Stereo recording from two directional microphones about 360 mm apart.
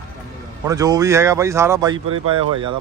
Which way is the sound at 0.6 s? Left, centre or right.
Centre.